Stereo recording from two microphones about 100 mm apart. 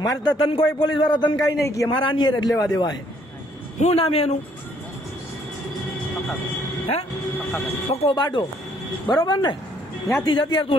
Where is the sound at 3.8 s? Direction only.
75° left (ahead or behind).